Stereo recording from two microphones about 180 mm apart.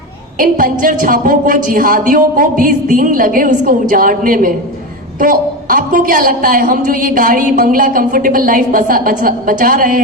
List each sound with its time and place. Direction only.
0.3 s a woman's voice: 50° right (ahead or behind)